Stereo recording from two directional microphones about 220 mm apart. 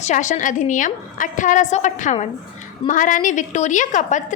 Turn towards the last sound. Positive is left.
turn(degrees=35)  # may be behind; listen again after turning